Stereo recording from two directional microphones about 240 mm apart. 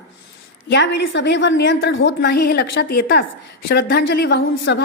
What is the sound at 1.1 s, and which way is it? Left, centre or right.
A woman's voice, left.